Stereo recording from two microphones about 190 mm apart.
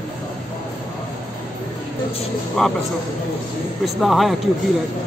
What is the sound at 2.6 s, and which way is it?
Speech, centre (ahead or behind).